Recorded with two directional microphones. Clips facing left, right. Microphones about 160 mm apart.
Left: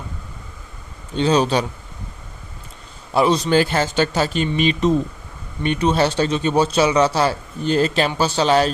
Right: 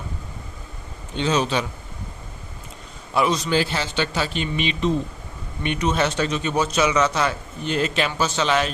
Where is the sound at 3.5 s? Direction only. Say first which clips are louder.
Left 5 dB; 50° left (ahead or behind).